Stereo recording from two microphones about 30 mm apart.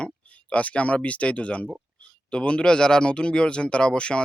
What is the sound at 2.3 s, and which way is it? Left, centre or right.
Speech, left.